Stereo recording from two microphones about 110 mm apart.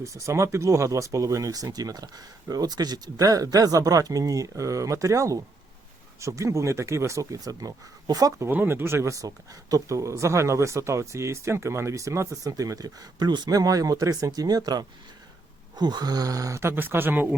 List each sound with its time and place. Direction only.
0.0 s speech: 25° right (ahead or behind)
8.4 s speech: 20° right (ahead or behind)